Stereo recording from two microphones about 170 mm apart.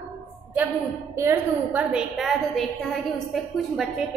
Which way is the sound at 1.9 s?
Centre (ahead or behind).